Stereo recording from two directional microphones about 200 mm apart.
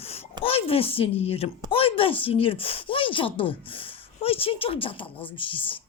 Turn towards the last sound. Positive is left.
turn(degrees=25)  # may be behind; listen again after turning